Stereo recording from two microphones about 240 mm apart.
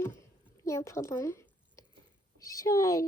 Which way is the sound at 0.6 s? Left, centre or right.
Centre.